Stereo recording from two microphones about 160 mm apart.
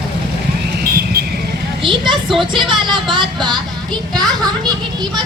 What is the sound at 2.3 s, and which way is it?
Speech, centre (ahead or behind).